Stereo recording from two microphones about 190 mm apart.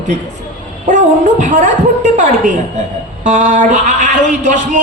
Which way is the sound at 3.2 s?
40° right (ahead or behind).